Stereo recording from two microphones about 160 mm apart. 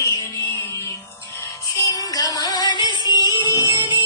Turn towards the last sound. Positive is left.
turn(degrees=30)  # may be behind; listen again after turning